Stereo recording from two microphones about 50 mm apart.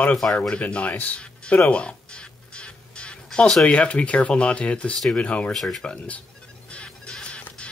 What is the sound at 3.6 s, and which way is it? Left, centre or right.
Speech, left.